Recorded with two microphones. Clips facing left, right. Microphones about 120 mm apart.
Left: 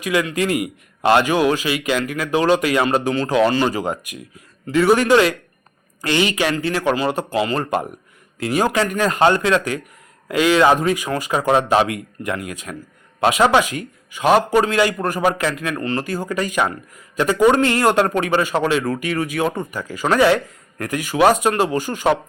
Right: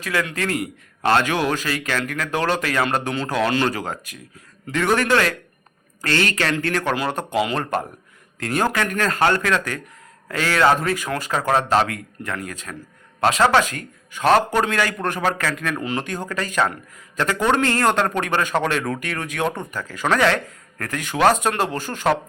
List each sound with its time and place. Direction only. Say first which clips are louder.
0.0 s a man's voice: left 5 dB; 15° left (ahead or behind)
7.3 s speech: even; 5° right (ahead or behind)
7.6 s a man's voice: left 3 dB; 10° left (ahead or behind)
15.7 s speech: left 2 dB; 5° right (ahead or behind)
16.0 s a man's voice: left 4 dB; 10° left (ahead or behind)